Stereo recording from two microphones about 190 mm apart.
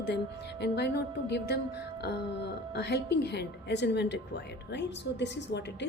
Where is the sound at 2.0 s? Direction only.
60° left (ahead or behind).